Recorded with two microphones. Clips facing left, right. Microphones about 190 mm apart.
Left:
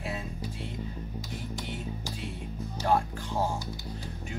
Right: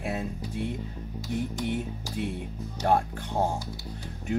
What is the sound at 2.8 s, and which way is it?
Speech, 55° right (ahead or behind).